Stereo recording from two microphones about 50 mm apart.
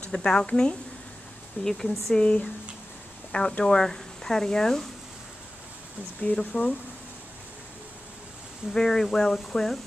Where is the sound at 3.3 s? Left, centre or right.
Left; by 4.9 s centre.